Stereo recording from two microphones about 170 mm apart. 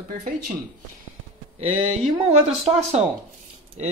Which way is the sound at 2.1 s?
35° right (ahead or behind).